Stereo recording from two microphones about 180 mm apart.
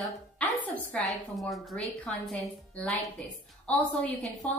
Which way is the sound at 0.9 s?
Centre (ahead or behind).